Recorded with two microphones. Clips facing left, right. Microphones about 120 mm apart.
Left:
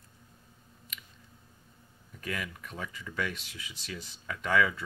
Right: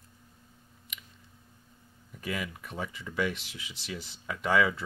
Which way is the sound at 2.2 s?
15° right (ahead or behind).